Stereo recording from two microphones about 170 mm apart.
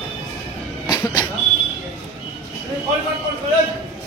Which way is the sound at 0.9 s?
25° left (ahead or behind).